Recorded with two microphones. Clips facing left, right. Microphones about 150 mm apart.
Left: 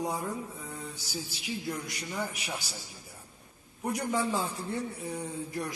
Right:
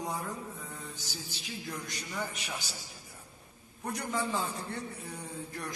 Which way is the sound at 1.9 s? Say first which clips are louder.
Left 2 dB; 10° left (ahead or behind).